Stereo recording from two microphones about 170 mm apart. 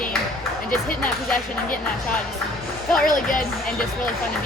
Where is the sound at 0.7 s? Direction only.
55° left (ahead or behind).